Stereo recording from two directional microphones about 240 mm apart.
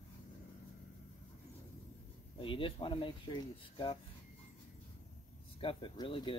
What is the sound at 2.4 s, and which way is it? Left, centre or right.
Speech, left.